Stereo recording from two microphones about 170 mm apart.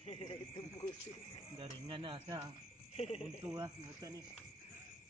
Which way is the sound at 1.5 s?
30° right (ahead or behind).